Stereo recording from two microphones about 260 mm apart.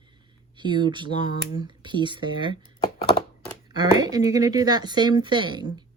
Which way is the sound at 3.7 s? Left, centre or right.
Centre.